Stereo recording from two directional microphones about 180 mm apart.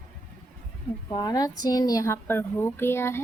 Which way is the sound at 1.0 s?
25° left (ahead or behind).